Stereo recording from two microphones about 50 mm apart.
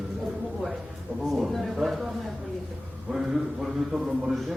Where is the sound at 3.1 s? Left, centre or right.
Centre.